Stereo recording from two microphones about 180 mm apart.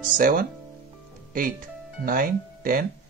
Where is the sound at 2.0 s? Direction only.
50° right (ahead or behind).